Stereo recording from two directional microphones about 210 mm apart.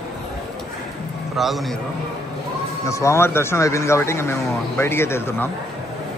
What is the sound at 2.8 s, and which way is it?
Speech, 15° left (ahead or behind).